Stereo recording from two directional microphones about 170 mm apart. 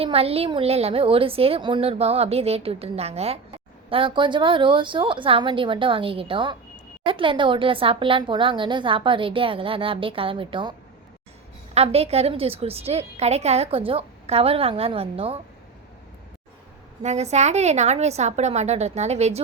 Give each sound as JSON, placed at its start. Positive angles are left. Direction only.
{"t": 0.0, "sound": "a woman's voice", "side_deg": -35}
{"t": 17.0, "sound": "speech", "side_deg": -40}